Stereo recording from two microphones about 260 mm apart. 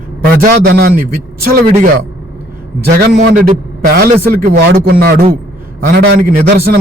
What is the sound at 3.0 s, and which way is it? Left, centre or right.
A man's voice, right.